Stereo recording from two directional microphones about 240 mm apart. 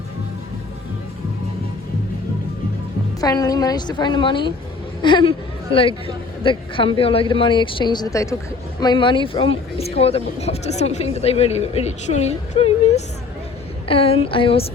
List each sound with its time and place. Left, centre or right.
3.2 s a woman's voice: centre